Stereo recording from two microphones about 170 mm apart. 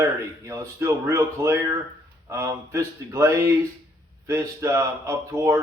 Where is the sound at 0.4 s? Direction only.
15° right (ahead or behind).